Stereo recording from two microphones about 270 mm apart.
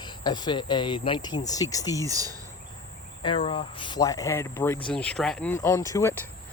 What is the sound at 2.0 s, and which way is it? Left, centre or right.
Speech, centre.